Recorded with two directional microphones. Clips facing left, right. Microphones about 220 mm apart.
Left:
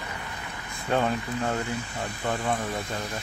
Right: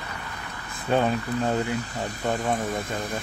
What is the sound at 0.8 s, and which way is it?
Speech, 15° right (ahead or behind).